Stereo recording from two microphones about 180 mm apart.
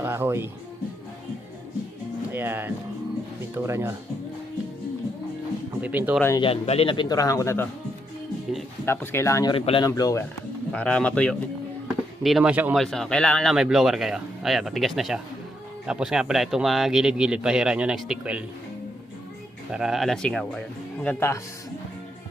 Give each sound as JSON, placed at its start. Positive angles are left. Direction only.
{"t": 0.0, "sound": "speech", "side_deg": -15}
{"t": 2.3, "sound": "speech", "side_deg": -10}
{"t": 5.8, "sound": "speech", "side_deg": -10}
{"t": 6.3, "sound": "speech", "side_deg": 30}
{"t": 8.9, "sound": "speech", "side_deg": 15}
{"t": 9.9, "sound": "speech", "side_deg": 15}
{"t": 10.7, "sound": "speech", "side_deg": 5}
{"t": 12.8, "sound": "speech", "side_deg": 0}
{"t": 19.7, "sound": "speech", "side_deg": -5}